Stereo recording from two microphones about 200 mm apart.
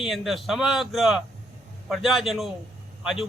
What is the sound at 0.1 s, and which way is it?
A man's voice, centre (ahead or behind).